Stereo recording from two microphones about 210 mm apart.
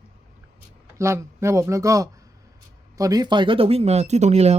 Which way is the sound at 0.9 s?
15° right (ahead or behind).